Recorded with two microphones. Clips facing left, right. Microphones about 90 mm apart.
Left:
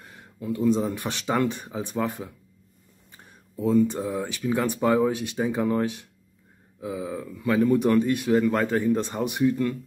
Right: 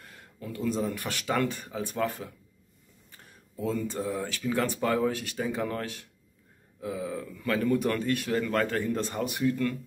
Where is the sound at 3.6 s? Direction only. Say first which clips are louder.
Left 9 dB; 20° left (ahead or behind).